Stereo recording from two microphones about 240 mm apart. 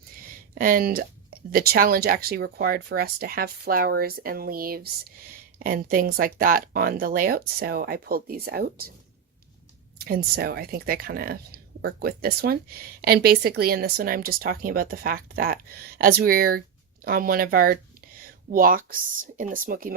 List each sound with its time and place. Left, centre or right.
0.5 s speech: right
10.0 s speech: right